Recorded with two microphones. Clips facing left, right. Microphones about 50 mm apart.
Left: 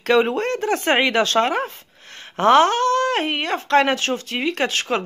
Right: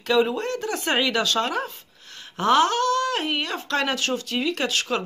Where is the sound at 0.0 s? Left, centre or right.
Left.